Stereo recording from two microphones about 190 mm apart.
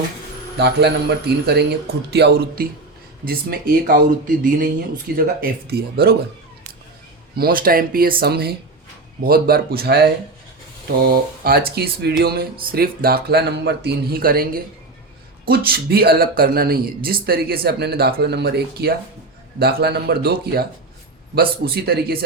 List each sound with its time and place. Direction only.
0.6 s a man's voice: 60° right (ahead or behind)
7.3 s a man's voice: 50° right (ahead or behind)